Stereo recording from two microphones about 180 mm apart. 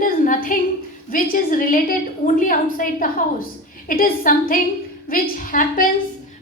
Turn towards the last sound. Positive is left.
turn(degrees=50)  # may be behind; listen again after turning